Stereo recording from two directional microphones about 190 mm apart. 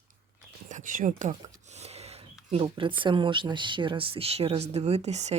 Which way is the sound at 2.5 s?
30° right (ahead or behind).